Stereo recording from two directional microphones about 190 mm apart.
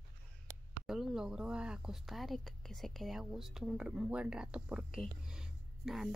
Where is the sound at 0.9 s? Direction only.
Centre (ahead or behind).